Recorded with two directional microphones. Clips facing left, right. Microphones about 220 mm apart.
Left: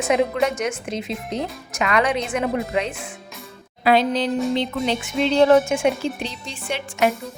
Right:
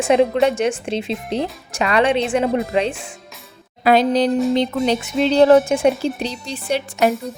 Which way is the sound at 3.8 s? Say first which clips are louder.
Right 4 dB; 45° right (ahead or behind).